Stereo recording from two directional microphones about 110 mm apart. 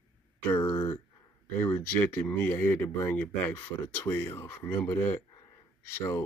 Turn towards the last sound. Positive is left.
turn(degrees=25)  # may be behind; listen again after turning